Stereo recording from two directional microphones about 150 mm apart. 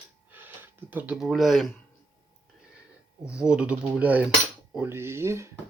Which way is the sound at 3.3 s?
5° right (ahead or behind).